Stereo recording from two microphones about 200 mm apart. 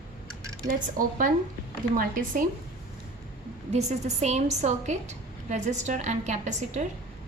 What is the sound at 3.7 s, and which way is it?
A woman's voice, 35° right (ahead or behind).